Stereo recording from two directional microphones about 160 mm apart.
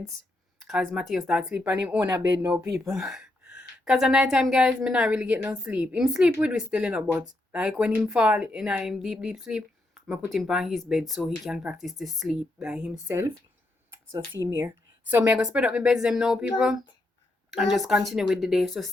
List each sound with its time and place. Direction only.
0.6 s a woman's voice: centre (ahead or behind)
13.1 s speech: 15° right (ahead or behind)
15.1 s a woman's voice: 10° right (ahead or behind)